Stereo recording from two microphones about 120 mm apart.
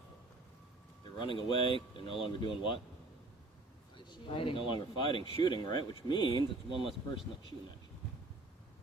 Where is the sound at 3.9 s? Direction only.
45° left (ahead or behind).